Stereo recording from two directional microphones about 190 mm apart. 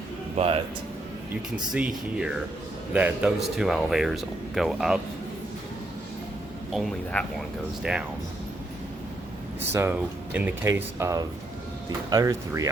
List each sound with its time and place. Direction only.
0.3 s speech: 30° right (ahead or behind)
1.7 s speech: 5° right (ahead or behind)
6.7 s speech: 5° left (ahead or behind)
10.3 s speech: 10° right (ahead or behind)